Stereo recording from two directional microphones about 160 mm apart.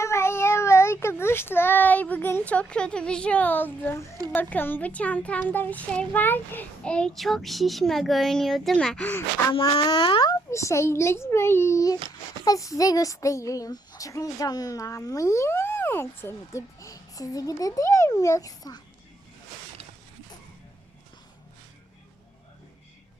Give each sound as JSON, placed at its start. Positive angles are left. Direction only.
{"t": 0.0, "sound": "speech", "side_deg": 15}
{"t": 9.5, "sound": "speech", "side_deg": 30}
{"t": 10.5, "sound": "speech", "side_deg": 20}